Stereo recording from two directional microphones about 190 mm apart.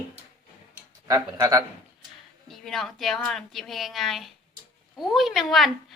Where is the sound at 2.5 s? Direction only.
Centre (ahead or behind).